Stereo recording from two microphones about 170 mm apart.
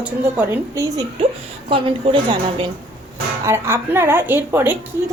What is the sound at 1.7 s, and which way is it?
Speech, 30° right (ahead or behind).